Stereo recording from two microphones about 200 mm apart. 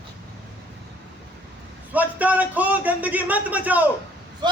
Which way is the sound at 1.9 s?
10° right (ahead or behind).